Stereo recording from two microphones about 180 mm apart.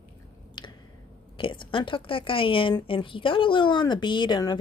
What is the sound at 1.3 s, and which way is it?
A woman's voice, 30° left (ahead or behind).